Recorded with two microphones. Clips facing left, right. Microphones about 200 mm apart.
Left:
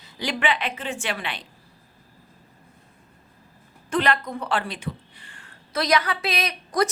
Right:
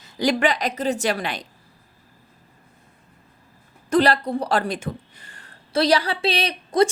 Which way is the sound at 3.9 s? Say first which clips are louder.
Right 5 dB; 35° right (ahead or behind).